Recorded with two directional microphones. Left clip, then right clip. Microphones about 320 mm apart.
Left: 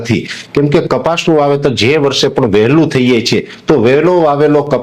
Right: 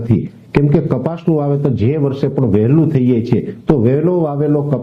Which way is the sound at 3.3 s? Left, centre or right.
Left.